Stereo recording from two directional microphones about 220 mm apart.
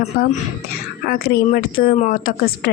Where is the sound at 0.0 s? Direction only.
35° left (ahead or behind).